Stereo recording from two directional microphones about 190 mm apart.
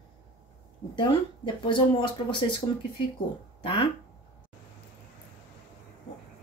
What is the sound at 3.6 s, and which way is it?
Speech, 25° left (ahead or behind).